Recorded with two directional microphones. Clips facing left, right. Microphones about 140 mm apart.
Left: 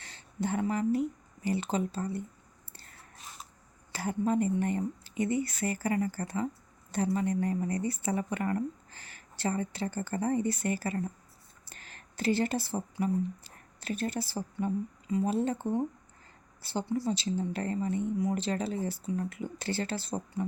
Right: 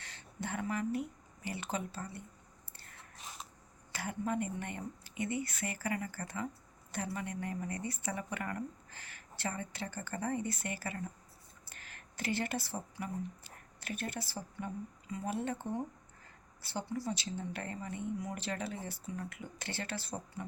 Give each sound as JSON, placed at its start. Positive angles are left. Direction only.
{"t": 0.0, "sound": "speech", "side_deg": 30}
{"t": 3.9, "sound": "a woman's voice", "side_deg": 30}